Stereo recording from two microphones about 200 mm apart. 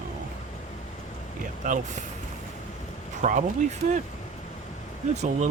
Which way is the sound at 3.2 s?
35° right (ahead or behind).